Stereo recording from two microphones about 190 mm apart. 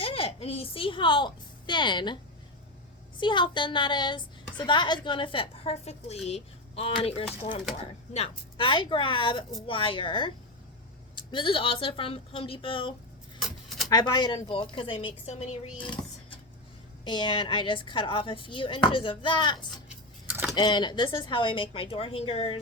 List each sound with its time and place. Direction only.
0.0 s a woman's voice: 30° left (ahead or behind)
3.2 s a woman's voice: 25° left (ahead or behind)
13.4 s a sound: centre (ahead or behind)
13.9 s a woman's voice: 20° left (ahead or behind)
19.9 s keys jangling: 10° right (ahead or behind)
20.6 s a woman's voice: 25° left (ahead or behind)